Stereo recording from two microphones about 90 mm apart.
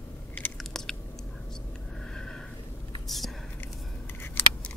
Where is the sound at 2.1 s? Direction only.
5° left (ahead or behind).